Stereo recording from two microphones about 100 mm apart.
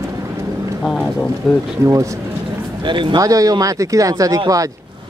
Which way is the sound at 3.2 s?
35° right (ahead or behind).